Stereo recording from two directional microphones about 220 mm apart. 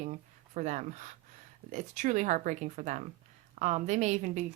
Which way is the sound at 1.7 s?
35° right (ahead or behind).